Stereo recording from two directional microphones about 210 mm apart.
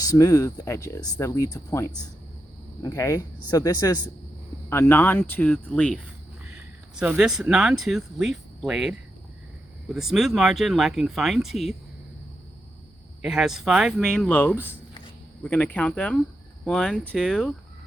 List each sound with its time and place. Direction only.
0.0 s speech: 15° left (ahead or behind)
6.5 s speech: 5° right (ahead or behind)
13.2 s speech: centre (ahead or behind)